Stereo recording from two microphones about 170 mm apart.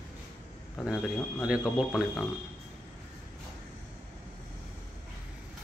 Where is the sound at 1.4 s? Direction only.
5° right (ahead or behind).